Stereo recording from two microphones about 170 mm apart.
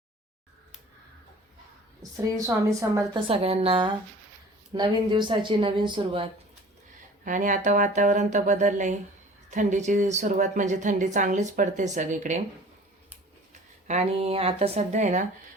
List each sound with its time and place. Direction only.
2.2 s speech: 20° right (ahead or behind)
3.2 s a woman's voice: 35° right (ahead or behind)
7.3 s a woman's voice: 50° right (ahead or behind)
13.5 s speech: 40° right (ahead or behind)